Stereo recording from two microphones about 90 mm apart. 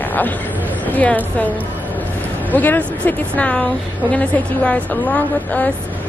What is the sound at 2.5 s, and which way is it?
A woman's voice, 20° left (ahead or behind).